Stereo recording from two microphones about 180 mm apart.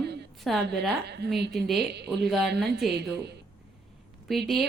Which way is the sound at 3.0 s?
65° right (ahead or behind).